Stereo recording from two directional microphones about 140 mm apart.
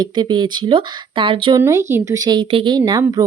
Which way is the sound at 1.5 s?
20° right (ahead or behind).